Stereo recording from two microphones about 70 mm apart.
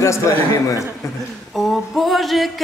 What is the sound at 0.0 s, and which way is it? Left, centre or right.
Speech, left.